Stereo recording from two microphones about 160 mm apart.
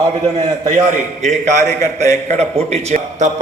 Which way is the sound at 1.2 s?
45° right (ahead or behind).